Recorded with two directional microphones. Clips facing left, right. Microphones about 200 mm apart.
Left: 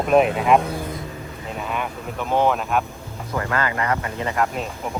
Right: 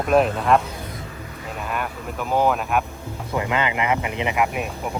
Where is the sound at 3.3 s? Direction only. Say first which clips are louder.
Right 1 dB; 15° right (ahead or behind).